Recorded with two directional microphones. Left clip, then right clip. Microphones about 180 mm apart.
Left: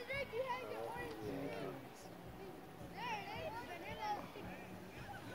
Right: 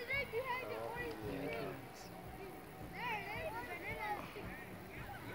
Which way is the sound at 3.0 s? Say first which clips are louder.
Right 2 dB; 60° left (ahead or behind).